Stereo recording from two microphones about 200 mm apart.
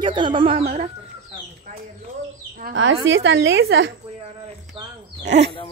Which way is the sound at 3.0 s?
65° right (ahead or behind).